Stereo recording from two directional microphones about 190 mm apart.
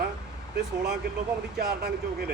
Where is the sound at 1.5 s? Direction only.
60° right (ahead or behind).